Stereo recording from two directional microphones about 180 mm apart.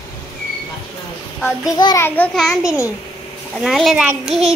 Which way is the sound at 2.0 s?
10° left (ahead or behind).